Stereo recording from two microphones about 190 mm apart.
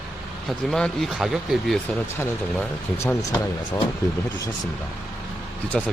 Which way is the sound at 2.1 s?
15° left (ahead or behind).